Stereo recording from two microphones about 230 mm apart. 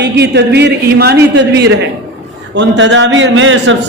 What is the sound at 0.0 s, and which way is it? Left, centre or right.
A man's voice, right.